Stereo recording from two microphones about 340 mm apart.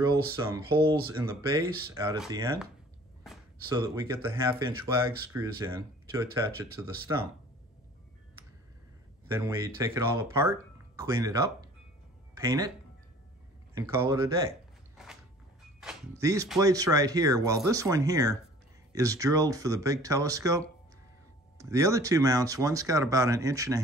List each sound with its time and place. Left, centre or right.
0.0 s speech: centre
9.8 s speech: centre
13.7 s speech: centre
15.0 s creak: centre
15.8 s speech: centre